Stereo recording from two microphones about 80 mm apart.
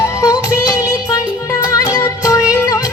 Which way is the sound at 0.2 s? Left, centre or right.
Left.